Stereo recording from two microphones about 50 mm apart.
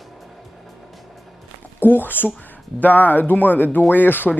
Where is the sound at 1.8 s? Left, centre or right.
Left.